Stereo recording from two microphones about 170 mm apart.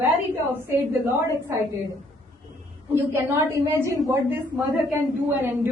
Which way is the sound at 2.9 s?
15° right (ahead or behind).